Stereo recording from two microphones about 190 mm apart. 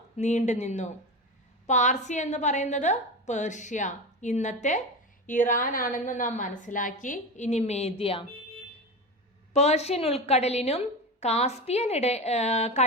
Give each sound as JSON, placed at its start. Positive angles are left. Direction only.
{"t": 0.2, "sound": "a woman's voice", "side_deg": 40}
{"t": 9.5, "sound": "a woman's voice", "side_deg": 35}